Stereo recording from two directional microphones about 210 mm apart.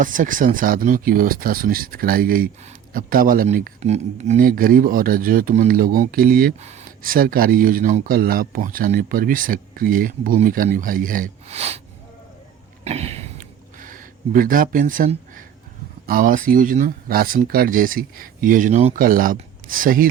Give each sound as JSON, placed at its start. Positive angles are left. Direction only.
{"t": 0.0, "sound": "speech", "side_deg": -40}
{"t": 12.8, "sound": "a sound", "side_deg": -30}
{"t": 16.0, "sound": "speech", "side_deg": -40}